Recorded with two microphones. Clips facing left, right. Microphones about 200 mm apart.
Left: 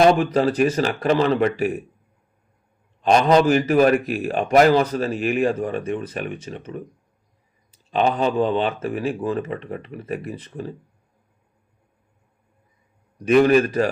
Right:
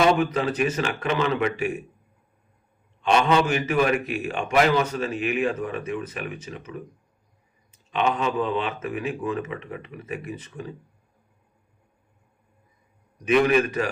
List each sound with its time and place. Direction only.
0.0 s speech: 40° left (ahead or behind)
3.0 s speech: 35° left (ahead or behind)
13.2 s speech: 35° left (ahead or behind)